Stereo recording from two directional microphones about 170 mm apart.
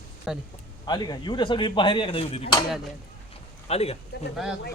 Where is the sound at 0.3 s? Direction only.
5° right (ahead or behind).